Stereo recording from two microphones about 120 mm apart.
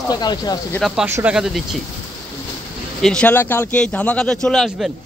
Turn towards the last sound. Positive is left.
turn(degrees=5)  # may be behind; listen again after turning